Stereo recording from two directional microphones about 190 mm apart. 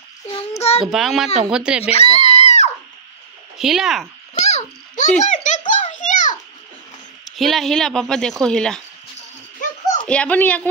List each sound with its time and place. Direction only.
0.6 s child singing: 30° left (ahead or behind)
0.8 s a woman's voice: centre (ahead or behind)
1.8 s a sound: 35° left (ahead or behind)
3.5 s a woman's voice: 5° right (ahead or behind)
4.4 s babbling: 40° left (ahead or behind)
5.2 s a child's voice: 40° left (ahead or behind)
5.7 s a sound: 40° left (ahead or behind)
7.3 s a woman's voice: centre (ahead or behind)
10.0 s speech: 5° left (ahead or behind)